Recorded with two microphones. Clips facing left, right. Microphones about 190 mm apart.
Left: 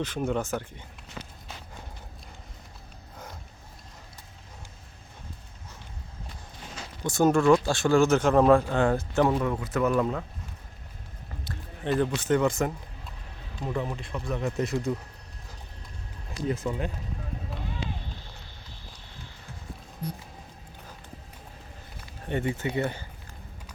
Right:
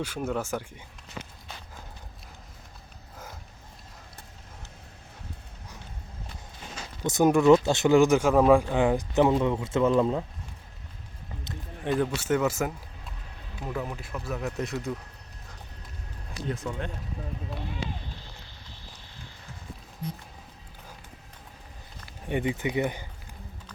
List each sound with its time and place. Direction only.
0.0 s speech: 5° right (ahead or behind)
7.0 s speech: 20° right (ahead or behind)
11.9 s speech: 5° right (ahead or behind)
16.5 s speech: 5° left (ahead or behind)
22.3 s speech: 15° right (ahead or behind)